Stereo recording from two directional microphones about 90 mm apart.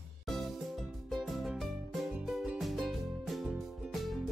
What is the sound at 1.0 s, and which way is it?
Music, centre (ahead or behind).